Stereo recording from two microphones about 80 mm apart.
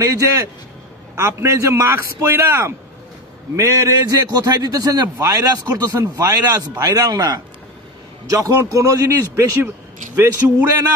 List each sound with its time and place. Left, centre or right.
0.0 s a man's voice: right
1.1 s a man's voice: right
8.3 s a man's voice: right